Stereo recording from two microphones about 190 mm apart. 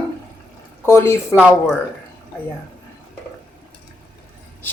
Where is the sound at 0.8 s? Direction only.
15° left (ahead or behind).